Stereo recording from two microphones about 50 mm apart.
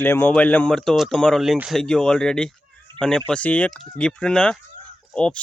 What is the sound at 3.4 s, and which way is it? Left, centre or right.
Speech, left.